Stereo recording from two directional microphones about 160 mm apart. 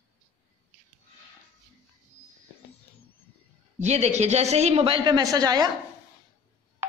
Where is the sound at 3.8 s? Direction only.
45° right (ahead or behind); by 5.7 s 25° right (ahead or behind).